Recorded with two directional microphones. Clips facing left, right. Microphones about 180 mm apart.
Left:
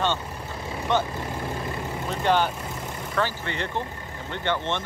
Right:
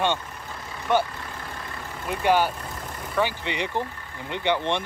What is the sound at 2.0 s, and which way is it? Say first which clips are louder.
Speech: right 2 dB; 10° right (ahead or behind).